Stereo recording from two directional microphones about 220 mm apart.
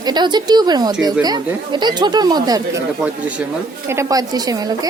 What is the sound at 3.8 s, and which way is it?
A woman's voice, 15° right (ahead or behind).